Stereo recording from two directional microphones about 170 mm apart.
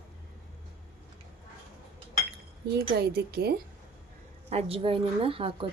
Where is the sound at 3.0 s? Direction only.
70° right (ahead or behind).